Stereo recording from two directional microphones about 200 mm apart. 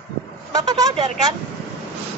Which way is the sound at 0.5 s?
20° right (ahead or behind).